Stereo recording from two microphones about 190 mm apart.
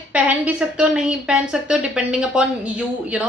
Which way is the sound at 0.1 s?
5° right (ahead or behind).